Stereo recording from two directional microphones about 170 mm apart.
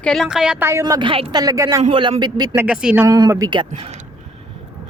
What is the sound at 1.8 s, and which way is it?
Speech, 30° right (ahead or behind).